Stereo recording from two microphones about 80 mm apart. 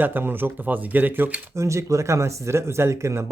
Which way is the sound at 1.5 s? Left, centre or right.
Right.